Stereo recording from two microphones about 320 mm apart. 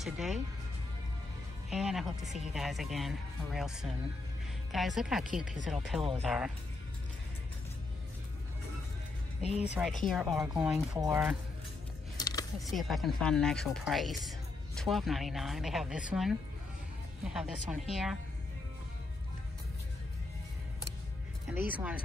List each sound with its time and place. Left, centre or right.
0.0 s a woman's voice: centre
1.7 s a woman's voice: centre
9.4 s speech: centre
10.0 s a woman's voice: centre
12.2 s a sound: centre
12.7 s a woman's voice: centre
21.5 s a woman's voice: centre